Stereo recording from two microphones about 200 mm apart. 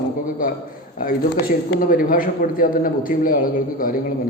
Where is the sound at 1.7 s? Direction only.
45° left (ahead or behind).